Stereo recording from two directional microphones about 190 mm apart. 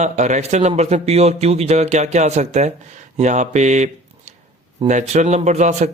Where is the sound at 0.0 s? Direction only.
40° right (ahead or behind).